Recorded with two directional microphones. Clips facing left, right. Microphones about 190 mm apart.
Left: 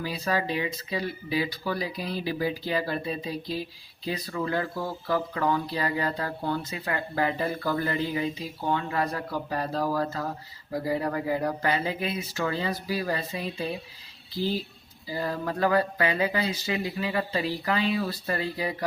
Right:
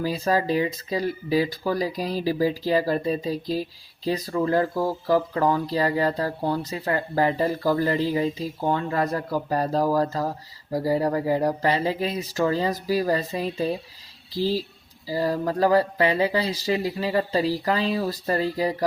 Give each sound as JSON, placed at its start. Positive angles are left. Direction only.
{"t": 0.0, "sound": "speech", "side_deg": -40}
{"t": 15.0, "sound": "speech", "side_deg": -35}